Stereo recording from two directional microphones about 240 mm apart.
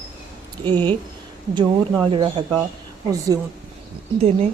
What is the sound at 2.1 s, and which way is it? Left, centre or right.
Speech, right.